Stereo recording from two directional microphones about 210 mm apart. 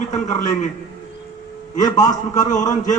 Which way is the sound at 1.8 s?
20° left (ahead or behind).